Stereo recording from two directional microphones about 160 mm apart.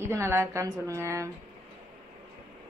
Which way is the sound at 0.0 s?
15° right (ahead or behind).